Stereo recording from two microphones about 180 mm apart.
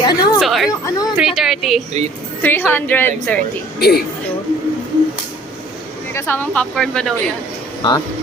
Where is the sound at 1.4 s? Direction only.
Centre (ahead or behind).